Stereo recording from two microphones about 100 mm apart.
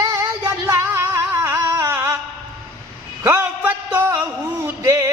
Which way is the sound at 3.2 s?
25° right (ahead or behind).